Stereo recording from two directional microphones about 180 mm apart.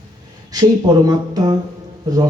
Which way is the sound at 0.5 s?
20° right (ahead or behind).